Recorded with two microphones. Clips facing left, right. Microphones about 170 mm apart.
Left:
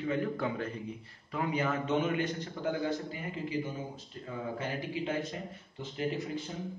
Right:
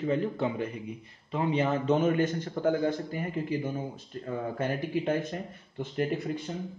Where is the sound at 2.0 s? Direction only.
45° right (ahead or behind).